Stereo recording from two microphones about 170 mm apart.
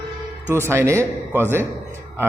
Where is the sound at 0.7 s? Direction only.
15° right (ahead or behind).